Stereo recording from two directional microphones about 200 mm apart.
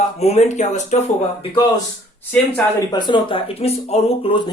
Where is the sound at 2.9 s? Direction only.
20° left (ahead or behind).